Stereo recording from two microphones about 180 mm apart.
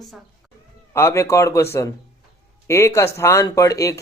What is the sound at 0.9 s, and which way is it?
Speech, 15° left (ahead or behind).